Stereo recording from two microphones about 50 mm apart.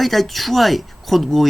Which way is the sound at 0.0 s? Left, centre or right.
Centre.